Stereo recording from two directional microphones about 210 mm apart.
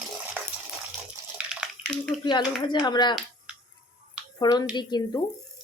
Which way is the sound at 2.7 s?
20° left (ahead or behind).